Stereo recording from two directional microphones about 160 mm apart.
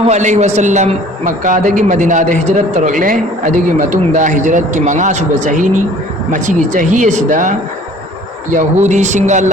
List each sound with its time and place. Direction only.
0.0 s a man's voice: 45° right (ahead or behind)
8.5 s a man's voice: 50° right (ahead or behind)